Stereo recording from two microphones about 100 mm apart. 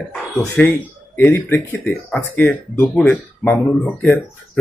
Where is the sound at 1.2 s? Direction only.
20° left (ahead or behind).